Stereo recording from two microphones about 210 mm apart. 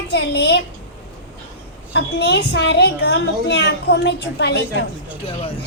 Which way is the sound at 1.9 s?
55° left (ahead or behind).